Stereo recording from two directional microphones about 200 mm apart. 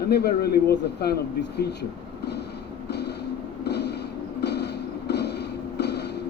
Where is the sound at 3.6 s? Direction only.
55° left (ahead or behind).